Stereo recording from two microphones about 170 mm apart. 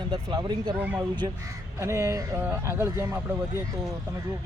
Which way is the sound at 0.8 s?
10° right (ahead or behind).